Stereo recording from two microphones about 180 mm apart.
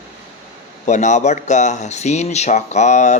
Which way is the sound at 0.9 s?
40° left (ahead or behind).